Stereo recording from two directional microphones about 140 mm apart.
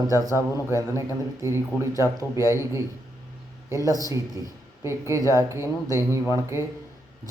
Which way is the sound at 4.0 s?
25° right (ahead or behind).